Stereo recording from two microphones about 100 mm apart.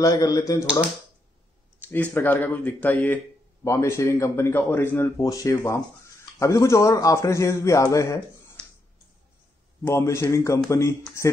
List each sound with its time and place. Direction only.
0.0 s a man's voice: 35° left (ahead or behind)
1.9 s speech: 20° left (ahead or behind)
3.6 s a man's voice: 30° left (ahead or behind)
5.1 s a man's voice: 35° left (ahead or behind)
9.8 s a man's voice: 30° left (ahead or behind)